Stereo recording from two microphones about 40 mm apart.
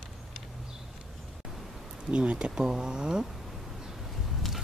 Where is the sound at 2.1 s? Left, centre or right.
Right.